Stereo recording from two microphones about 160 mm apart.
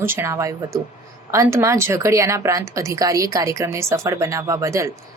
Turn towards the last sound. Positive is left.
turn(degrees=-20)  # may be behind; listen again after turning